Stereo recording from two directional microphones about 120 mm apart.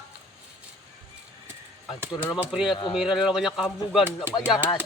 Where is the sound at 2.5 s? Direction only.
5° right (ahead or behind).